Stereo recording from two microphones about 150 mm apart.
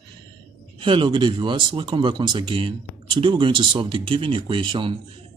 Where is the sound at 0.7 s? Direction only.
35° right (ahead or behind).